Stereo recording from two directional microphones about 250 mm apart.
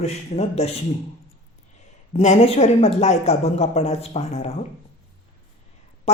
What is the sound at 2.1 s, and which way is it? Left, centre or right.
Speech, left.